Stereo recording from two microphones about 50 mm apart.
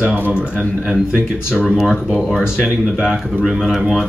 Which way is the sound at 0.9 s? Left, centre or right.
Centre.